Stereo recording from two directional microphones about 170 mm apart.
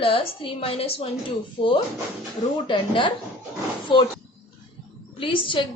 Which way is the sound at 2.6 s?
30° left (ahead or behind).